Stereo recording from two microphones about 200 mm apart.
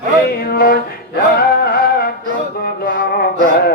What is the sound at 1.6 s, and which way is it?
Music, 50° left (ahead or behind).